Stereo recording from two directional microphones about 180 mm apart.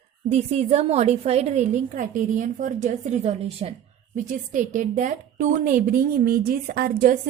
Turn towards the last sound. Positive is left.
turn(degrees=-55)  # may be behind; listen again after turning